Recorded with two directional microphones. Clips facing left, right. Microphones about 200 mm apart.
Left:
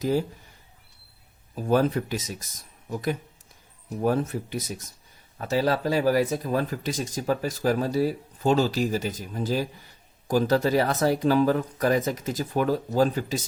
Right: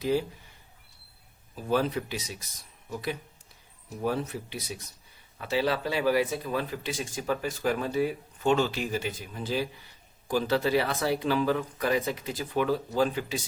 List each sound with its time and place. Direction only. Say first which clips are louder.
0.0 s speech: left 2 dB; 45° left (ahead or behind)
1.5 s speech: left 5 dB; 45° left (ahead or behind)